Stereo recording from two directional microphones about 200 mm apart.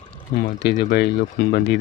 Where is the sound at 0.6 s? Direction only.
55° left (ahead or behind).